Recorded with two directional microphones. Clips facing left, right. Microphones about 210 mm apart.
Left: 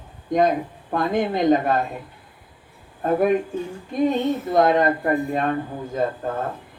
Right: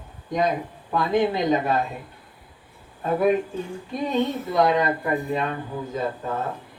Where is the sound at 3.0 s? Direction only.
50° left (ahead or behind).